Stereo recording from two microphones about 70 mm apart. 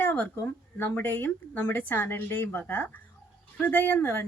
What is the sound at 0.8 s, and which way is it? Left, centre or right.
A woman's voice, left.